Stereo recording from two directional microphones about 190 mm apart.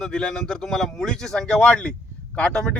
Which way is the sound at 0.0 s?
5° left (ahead or behind).